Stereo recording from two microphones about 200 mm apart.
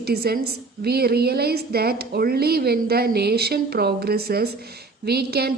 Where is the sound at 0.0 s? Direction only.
50° right (ahead or behind).